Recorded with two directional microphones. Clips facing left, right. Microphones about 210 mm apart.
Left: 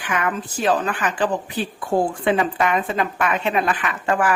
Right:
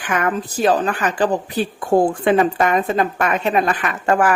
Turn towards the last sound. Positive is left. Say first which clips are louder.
# right 4 dB
turn(degrees=-45)  # may be behind; listen again after turning